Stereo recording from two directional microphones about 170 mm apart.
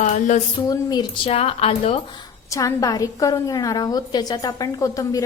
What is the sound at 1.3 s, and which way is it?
A woman's voice, 35° left (ahead or behind).